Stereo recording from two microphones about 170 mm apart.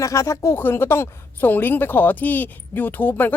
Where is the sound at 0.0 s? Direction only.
20° left (ahead or behind).